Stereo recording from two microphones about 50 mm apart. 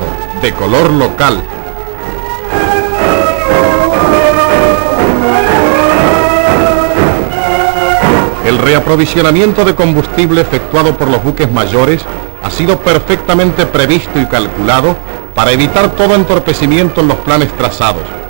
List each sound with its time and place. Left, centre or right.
0.4 s a man's voice: centre
2.5 s music: centre
12.5 s a man's voice: centre